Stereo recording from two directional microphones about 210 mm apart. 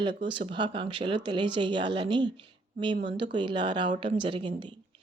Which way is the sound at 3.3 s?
20° right (ahead or behind).